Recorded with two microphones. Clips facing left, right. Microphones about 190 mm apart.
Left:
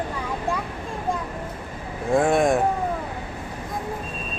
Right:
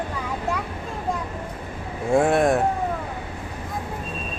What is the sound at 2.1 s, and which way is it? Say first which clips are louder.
Speech: right 1 dB; 5° right (ahead or behind).